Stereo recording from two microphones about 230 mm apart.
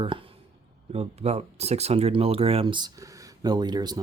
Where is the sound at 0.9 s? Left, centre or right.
Right.